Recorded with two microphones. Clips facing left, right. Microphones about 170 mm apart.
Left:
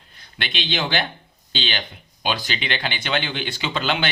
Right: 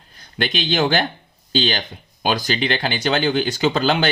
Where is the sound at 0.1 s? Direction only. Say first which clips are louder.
Right 8 dB; 40° right (ahead or behind).